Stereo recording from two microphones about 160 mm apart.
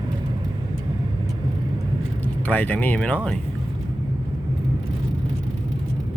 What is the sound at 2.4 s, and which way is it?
Speech, 10° left (ahead or behind).